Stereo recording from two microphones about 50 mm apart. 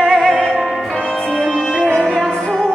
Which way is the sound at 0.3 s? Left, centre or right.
Centre.